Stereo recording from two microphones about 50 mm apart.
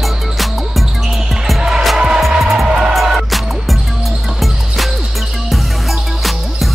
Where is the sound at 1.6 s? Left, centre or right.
Centre.